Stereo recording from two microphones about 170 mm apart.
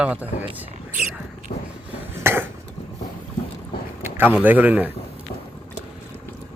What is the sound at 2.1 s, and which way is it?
Cough, 15° right (ahead or behind).